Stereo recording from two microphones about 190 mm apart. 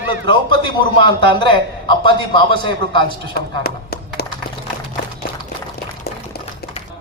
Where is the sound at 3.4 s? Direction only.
55° left (ahead or behind).